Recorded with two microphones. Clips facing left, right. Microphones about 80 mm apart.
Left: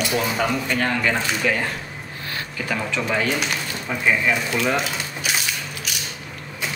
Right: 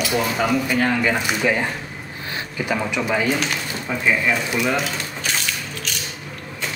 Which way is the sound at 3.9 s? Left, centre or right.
Centre.